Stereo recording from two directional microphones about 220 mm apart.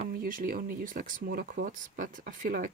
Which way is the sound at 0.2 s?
40° right (ahead or behind).